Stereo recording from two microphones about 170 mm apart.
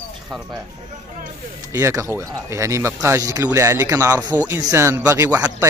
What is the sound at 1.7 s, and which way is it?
Speech, 15° right (ahead or behind).